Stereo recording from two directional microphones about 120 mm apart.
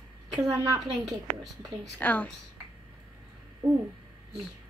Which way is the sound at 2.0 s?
15° left (ahead or behind).